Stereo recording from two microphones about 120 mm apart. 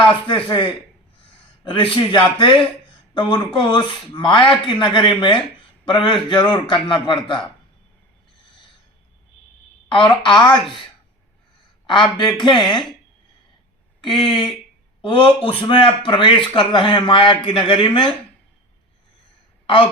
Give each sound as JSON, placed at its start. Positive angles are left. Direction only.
{"t": 0.3, "sound": "a man's voice", "side_deg": 45}
{"t": 9.9, "sound": "a man's voice", "side_deg": 40}
{"t": 11.9, "sound": "a man's voice", "side_deg": 40}
{"t": 14.0, "sound": "speech", "side_deg": 45}